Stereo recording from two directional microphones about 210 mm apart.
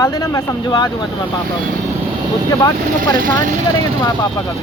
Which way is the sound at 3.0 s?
40° right (ahead or behind).